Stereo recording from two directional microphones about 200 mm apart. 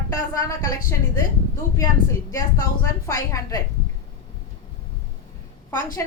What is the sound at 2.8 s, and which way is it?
Speech, 15° left (ahead or behind).